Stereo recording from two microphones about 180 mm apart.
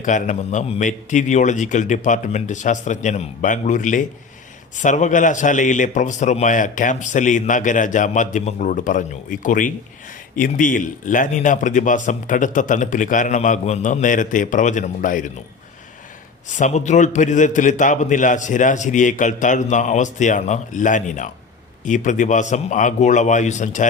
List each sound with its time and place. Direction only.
0.0 s a man's voice: 45° left (ahead or behind)
16.5 s a man's voice: 40° left (ahead or behind)